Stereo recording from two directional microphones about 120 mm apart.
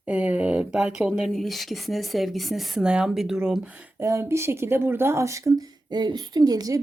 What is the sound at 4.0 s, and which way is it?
Speech, 25° right (ahead or behind).